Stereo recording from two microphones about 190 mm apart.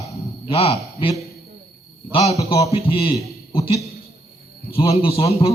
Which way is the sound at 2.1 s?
30° left (ahead or behind).